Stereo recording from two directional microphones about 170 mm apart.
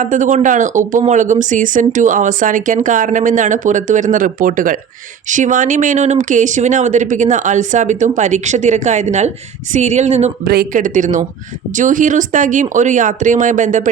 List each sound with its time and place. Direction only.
0.0 s speech: 50° right (ahead or behind)
10.4 s speech: 65° right (ahead or behind); by 13.9 s 50° right (ahead or behind)